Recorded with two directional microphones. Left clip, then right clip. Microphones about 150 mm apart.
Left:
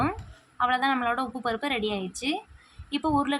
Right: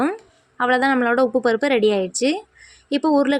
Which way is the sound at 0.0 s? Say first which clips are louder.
Right 6 dB; 35° right (ahead or behind).